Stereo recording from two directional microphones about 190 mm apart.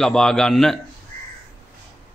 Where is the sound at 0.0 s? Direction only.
5° left (ahead or behind).